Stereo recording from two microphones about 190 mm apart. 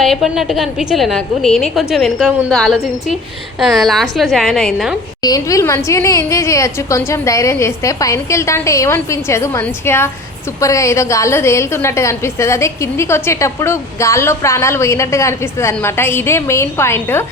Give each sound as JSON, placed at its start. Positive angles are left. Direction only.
{"t": 0.0, "sound": "a woman's voice", "side_deg": 0}
{"t": 5.2, "sound": "a woman's voice", "side_deg": 20}